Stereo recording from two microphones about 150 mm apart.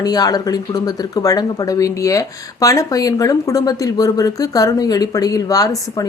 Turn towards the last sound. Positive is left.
turn(degrees=25)  # may be behind; listen again after turning